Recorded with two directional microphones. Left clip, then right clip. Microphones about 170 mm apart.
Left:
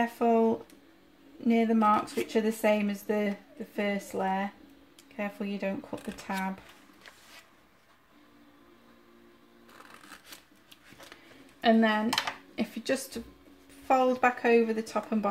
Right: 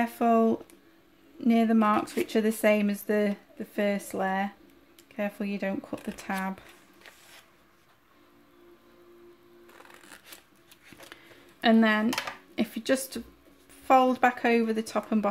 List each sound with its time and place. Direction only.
0.0 s speech: 40° right (ahead or behind)
11.6 s speech: 35° right (ahead or behind)